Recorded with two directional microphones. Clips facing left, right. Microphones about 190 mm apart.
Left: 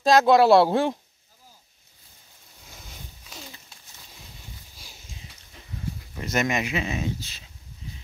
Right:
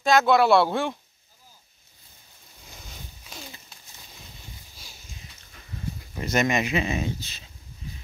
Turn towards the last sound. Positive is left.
turn(degrees=0)  # may be behind; listen again after turning